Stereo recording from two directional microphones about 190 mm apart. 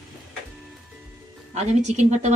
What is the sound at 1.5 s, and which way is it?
Speech, 35° right (ahead or behind).